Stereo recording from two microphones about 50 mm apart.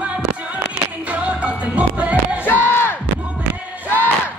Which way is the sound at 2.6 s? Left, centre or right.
Left.